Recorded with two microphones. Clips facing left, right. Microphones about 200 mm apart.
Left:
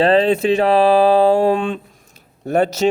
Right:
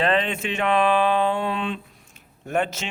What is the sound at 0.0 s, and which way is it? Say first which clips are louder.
Speech: left 9 dB; 35° left (ahead or behind).